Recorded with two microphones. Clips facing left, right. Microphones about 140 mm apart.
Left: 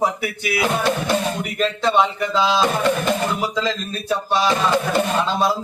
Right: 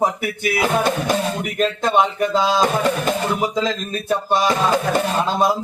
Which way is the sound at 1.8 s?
50° right (ahead or behind).